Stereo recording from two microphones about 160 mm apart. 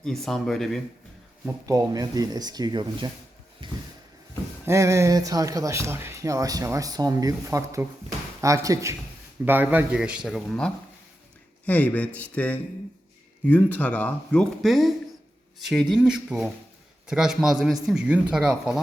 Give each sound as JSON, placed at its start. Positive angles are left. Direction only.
{"t": 0.0, "sound": "speech", "side_deg": 0}
{"t": 1.6, "sound": "speech", "side_deg": -20}
{"t": 3.6, "sound": "a sound", "side_deg": -30}
{"t": 4.6, "sound": "a man's voice", "side_deg": -15}